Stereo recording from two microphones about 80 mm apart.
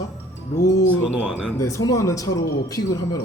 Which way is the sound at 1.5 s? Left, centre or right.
Left.